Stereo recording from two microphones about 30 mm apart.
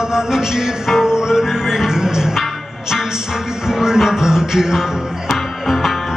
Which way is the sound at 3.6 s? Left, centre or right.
Centre.